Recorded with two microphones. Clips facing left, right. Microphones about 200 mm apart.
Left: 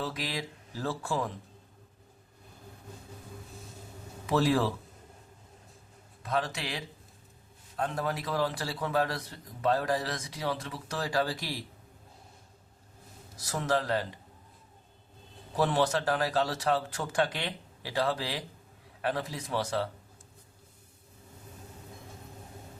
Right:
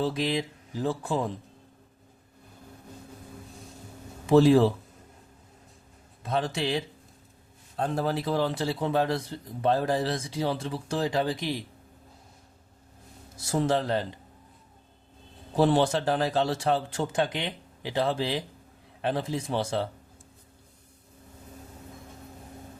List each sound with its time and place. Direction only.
0.0 s a man's voice: 25° right (ahead or behind)
4.3 s a man's voice: 25° right (ahead or behind)
6.2 s a man's voice: 25° right (ahead or behind)
13.3 s a man's voice: 25° right (ahead or behind)
15.5 s a man's voice: 25° right (ahead or behind)